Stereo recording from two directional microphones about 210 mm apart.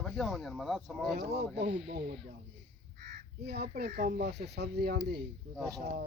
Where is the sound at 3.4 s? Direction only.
50° right (ahead or behind).